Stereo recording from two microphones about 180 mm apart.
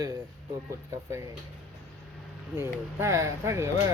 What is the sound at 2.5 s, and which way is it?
Speech, 15° right (ahead or behind).